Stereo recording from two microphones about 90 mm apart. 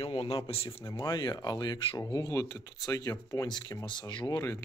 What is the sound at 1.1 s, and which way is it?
Speech, 50° left (ahead or behind).